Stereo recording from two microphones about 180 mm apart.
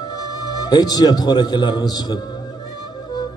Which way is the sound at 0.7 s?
20° left (ahead or behind).